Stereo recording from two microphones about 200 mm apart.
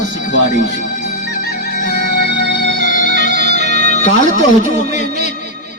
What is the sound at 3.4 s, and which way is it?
Music, 55° right (ahead or behind).